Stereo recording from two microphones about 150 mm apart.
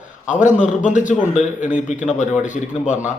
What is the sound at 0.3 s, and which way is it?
A man's voice, 55° left (ahead or behind).